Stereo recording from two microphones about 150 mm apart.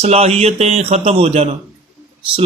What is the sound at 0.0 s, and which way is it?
Speech, 45° right (ahead or behind).